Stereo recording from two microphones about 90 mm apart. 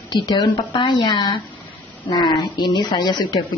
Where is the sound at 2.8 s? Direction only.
55° left (ahead or behind).